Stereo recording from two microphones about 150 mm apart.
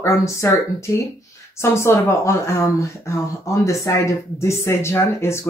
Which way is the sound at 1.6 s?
15° left (ahead or behind).